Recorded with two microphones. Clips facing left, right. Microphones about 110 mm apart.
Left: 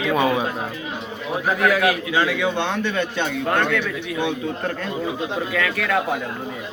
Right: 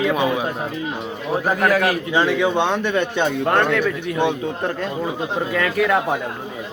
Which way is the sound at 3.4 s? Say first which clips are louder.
Right 2 dB; 40° right (ahead or behind).